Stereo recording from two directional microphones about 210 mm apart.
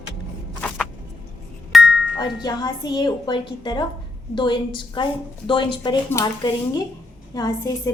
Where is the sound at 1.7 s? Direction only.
5° right (ahead or behind).